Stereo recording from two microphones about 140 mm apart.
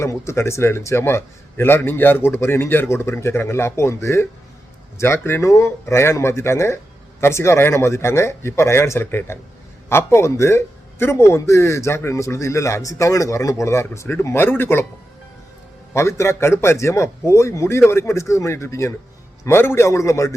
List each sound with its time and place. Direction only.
0.0 s a man's voice: 20° left (ahead or behind)
15.9 s a man's voice: 20° left (ahead or behind)